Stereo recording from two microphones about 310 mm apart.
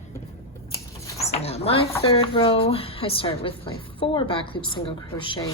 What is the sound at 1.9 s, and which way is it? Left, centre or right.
Speech, centre.